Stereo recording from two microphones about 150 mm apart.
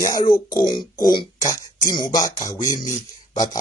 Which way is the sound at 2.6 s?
60° left (ahead or behind).